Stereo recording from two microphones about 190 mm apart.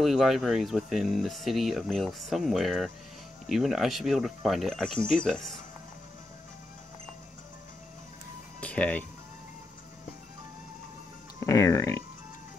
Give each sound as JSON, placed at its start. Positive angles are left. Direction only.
{"t": 0.0, "sound": "speech", "side_deg": 0}
{"t": 8.5, "sound": "music", "side_deg": 5}
{"t": 11.3, "sound": "speech", "side_deg": 15}